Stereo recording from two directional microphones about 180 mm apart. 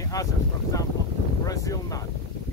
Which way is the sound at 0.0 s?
20° left (ahead or behind).